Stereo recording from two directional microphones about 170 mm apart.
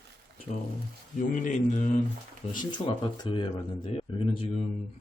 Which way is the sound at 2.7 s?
25° left (ahead or behind).